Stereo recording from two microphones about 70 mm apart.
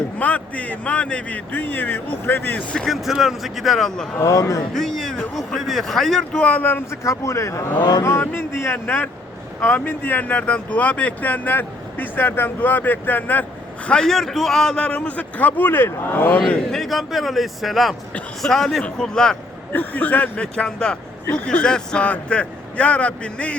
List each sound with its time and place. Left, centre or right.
0.2 s speech: left
2.7 s speech: centre
4.2 s a man's voice: left
4.7 s a sound: centre
5.5 s speech: centre
6.4 s speech: left
6.9 s a man's voice: left
7.8 s speech: left
8.2 s speech: left
13.8 s speech: centre; by 16.4 s left
16.7 s speech: centre
19.7 s speech: left